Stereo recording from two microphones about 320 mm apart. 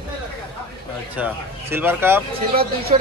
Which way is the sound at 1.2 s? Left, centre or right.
Centre.